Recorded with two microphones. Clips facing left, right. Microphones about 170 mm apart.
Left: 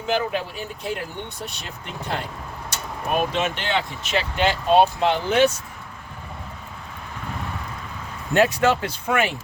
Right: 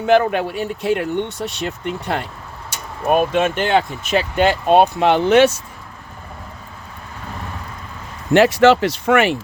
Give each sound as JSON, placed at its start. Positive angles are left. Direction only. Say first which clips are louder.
{"t": 0.0, "sound": "speech", "louder": "right 9 dB", "side_deg": -65}
{"t": 3.1, "sound": "speech", "louder": "right 7 dB", "side_deg": -50}
{"t": 8.3, "sound": "speech", "louder": "right 7 dB", "side_deg": -90}